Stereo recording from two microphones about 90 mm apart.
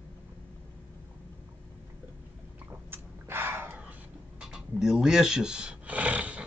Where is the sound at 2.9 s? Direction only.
25° right (ahead or behind).